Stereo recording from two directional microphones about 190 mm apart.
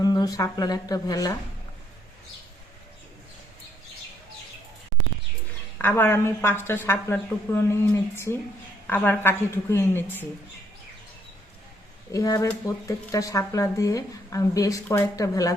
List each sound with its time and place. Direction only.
0.0 s a woman's voice: 20° left (ahead or behind)
5.8 s speech: 10° left (ahead or behind)
12.1 s speech: 15° left (ahead or behind)